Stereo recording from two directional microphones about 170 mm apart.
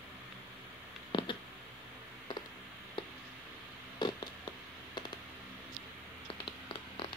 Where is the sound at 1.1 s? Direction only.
30° left (ahead or behind).